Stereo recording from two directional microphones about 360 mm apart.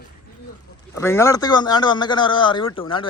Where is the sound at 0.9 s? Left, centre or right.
Centre.